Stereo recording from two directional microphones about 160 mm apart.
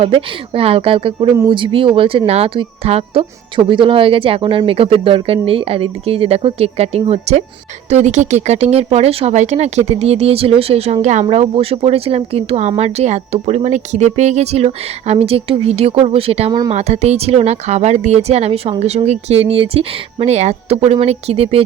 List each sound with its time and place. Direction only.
0.0 s speech: 35° right (ahead or behind)
16.5 s speech: 25° right (ahead or behind)
16.7 s speech: 40° right (ahead or behind)